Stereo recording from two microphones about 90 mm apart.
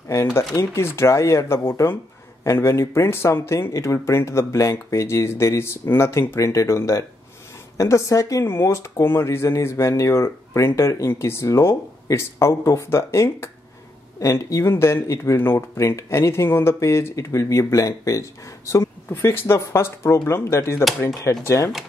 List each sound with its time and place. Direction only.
0.1 s speech: 30° left (ahead or behind)
21.2 s speech: 40° left (ahead or behind)